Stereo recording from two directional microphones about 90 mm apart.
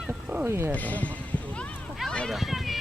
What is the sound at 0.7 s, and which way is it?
Speech, 15° left (ahead or behind).